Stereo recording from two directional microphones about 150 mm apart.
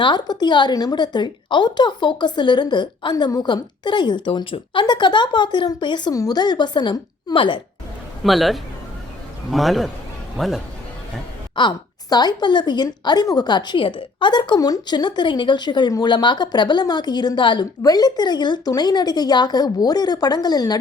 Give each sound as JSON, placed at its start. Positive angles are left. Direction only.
{"t": 0.0, "sound": "a woman's voice", "side_deg": 30}
{"t": 8.2, "sound": "a man's voice", "side_deg": 0}
{"t": 11.5, "sound": "a woman's voice", "side_deg": 30}